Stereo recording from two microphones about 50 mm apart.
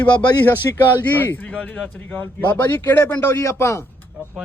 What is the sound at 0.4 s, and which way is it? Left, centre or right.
Speech, left.